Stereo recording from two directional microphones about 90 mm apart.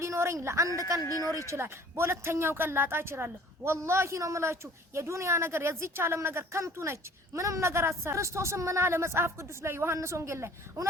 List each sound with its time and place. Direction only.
0.0 s a woman's voice: 35° right (ahead or behind)